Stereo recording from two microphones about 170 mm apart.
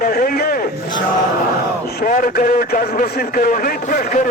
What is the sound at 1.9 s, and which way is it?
A man's voice, 60° left (ahead or behind).